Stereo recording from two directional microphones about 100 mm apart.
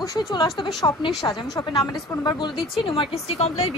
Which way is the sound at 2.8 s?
60° left (ahead or behind).